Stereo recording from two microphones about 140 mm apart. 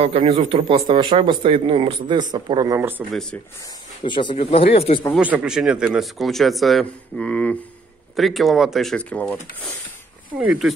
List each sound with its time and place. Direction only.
0.0 s speech: 50° right (ahead or behind); by 2.8 s 30° right (ahead or behind)
3.1 s speech: 5° left (ahead or behind)
4.0 s speech: 35° left (ahead or behind)
5.1 s speech: 10° right (ahead or behind); by 9.4 s 10° left (ahead or behind)
10.4 s speech: 10° right (ahead or behind)